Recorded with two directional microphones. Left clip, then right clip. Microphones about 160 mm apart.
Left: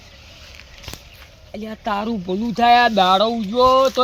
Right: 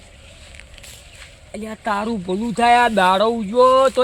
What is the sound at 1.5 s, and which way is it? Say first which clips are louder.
Speech: right 1 dB; 10° right (ahead or behind).